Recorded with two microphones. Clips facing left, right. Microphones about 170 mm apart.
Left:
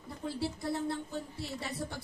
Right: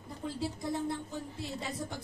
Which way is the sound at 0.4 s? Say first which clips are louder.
Even; 15° right (ahead or behind).